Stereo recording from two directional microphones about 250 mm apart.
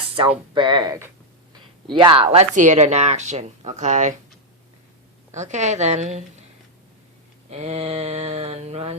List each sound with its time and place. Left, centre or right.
0.2 s speech: centre
5.3 s speech: right
7.5 s speech: right